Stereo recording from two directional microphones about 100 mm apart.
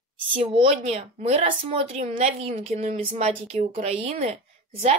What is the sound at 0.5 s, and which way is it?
A woman's voice, 80° right.